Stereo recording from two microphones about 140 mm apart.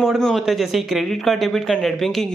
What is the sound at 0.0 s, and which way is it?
Speech, centre (ahead or behind).